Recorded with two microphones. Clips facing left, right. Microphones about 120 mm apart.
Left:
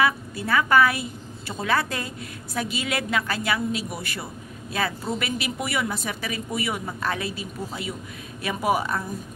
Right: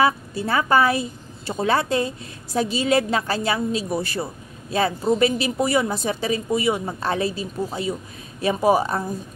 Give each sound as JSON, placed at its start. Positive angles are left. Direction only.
{"t": 0.0, "sound": "a woman's voice", "side_deg": -30}